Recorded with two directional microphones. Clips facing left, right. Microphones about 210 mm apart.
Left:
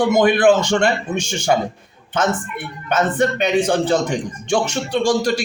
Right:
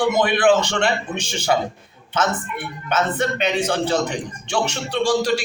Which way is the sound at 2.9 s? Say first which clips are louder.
Left 4 dB; 50° left (ahead or behind).